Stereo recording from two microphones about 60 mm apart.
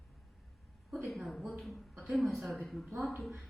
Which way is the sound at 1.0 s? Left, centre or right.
Centre.